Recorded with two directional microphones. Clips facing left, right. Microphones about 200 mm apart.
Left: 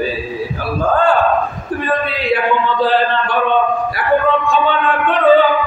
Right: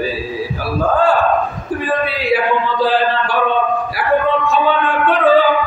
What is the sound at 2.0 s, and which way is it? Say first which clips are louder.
A man's voice: right 1 dB; 5° right (ahead or behind).